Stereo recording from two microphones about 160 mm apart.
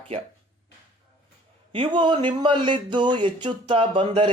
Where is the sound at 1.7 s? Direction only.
30° right (ahead or behind).